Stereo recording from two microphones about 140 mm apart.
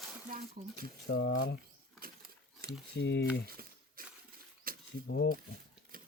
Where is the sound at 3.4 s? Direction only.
90° right.